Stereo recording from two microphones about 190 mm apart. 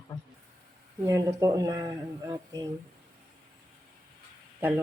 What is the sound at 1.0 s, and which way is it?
Speech, 20° right (ahead or behind).